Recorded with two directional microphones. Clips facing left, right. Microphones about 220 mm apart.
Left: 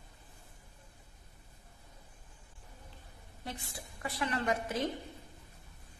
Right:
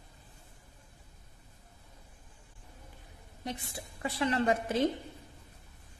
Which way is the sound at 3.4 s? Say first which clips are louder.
Right 4 dB; 20° right (ahead or behind).